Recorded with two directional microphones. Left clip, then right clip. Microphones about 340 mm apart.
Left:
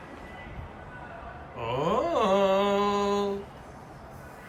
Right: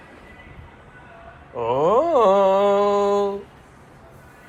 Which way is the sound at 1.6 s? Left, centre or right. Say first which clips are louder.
Right 9 dB; centre.